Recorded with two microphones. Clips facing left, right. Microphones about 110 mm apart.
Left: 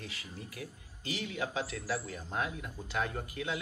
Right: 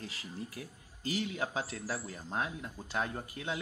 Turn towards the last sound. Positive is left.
turn(degrees=-30)  # may be behind; listen again after turning